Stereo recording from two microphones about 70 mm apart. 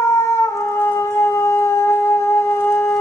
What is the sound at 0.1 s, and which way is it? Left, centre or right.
Howl, left.